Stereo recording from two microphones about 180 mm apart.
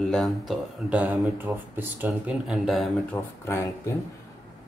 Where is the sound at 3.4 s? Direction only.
15° left (ahead or behind).